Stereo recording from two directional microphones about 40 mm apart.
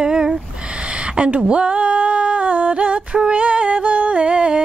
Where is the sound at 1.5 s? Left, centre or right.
Right.